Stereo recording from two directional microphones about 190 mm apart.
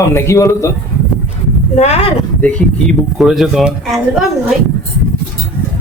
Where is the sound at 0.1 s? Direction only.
15° left (ahead or behind).